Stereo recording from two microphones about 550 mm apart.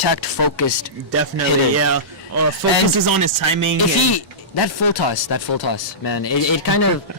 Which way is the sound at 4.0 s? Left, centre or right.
Left.